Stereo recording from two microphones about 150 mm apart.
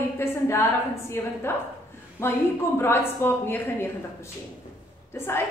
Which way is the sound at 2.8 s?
15° left (ahead or behind).